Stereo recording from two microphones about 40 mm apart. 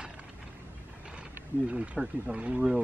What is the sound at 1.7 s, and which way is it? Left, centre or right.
Speech, right.